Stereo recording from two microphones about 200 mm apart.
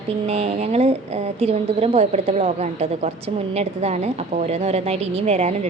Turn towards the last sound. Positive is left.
turn(degrees=-30)  # may be behind; listen again after turning